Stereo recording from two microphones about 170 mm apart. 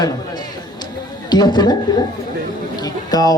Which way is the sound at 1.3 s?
25° left (ahead or behind).